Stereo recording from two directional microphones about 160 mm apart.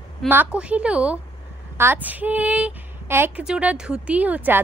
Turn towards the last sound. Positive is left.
turn(degrees=-10)  # may be behind; listen again after turning